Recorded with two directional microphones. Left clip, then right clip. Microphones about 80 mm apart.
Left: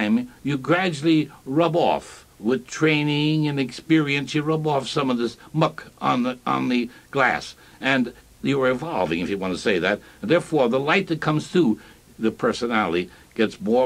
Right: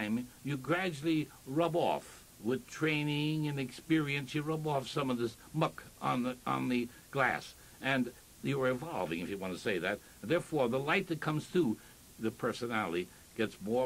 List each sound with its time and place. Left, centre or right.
0.0 s speech: right